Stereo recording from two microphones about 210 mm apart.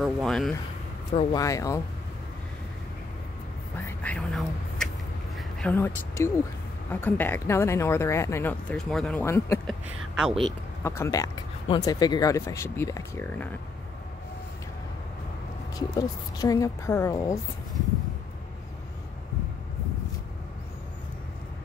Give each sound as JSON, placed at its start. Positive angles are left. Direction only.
{"t": 0.0, "sound": "speech", "side_deg": 0}
{"t": 1.3, "sound": "speech", "side_deg": 15}
{"t": 3.7, "sound": "speech", "side_deg": 10}
{"t": 9.7, "sound": "speech", "side_deg": 0}
{"t": 10.8, "sound": "speech", "side_deg": 15}
{"t": 16.0, "sound": "speech", "side_deg": 15}